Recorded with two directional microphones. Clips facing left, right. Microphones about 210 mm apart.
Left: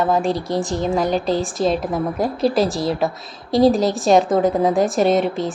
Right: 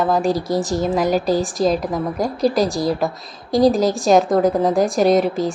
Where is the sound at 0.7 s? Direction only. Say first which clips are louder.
Right 1 dB; 5° right (ahead or behind).